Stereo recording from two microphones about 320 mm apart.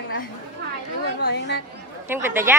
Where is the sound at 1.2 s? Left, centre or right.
Left.